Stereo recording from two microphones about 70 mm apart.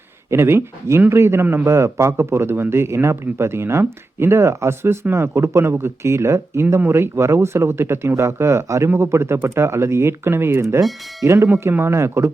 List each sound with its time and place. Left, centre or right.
0.3 s a man's voice: right
11.7 s a man's voice: right